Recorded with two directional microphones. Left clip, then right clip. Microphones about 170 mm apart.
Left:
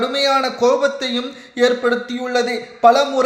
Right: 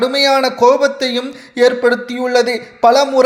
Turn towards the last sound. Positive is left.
turn(degrees=-35)  # may be behind; listen again after turning